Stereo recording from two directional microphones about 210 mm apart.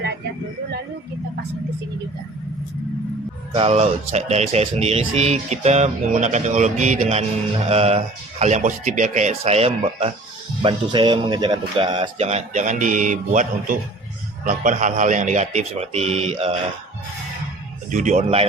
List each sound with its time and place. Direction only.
3.5 s speech: 30° right (ahead or behind)
17.9 s speech: 35° right (ahead or behind)